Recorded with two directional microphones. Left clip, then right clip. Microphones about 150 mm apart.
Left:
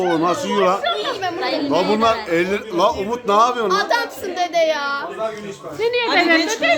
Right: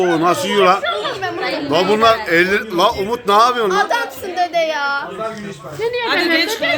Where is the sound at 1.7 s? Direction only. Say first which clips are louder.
Right 5 dB; 5° left (ahead or behind).